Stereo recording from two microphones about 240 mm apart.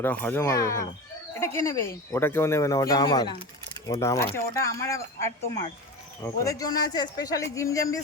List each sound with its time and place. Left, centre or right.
0.0 s speech: centre